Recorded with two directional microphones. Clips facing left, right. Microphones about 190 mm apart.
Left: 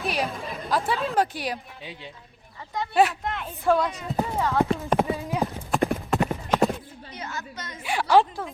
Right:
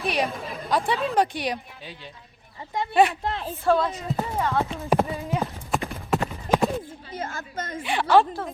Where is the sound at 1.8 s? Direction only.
20° left (ahead or behind).